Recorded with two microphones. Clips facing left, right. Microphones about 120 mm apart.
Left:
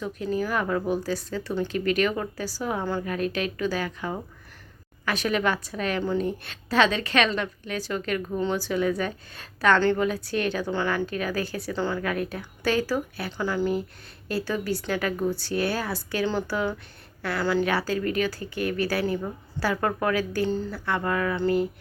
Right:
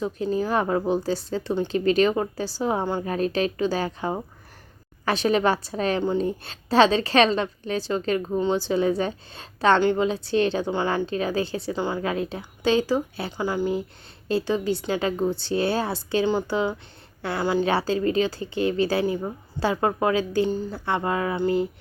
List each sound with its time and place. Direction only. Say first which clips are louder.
0.0 s a woman's voice: right 3 dB; 25° right (ahead or behind)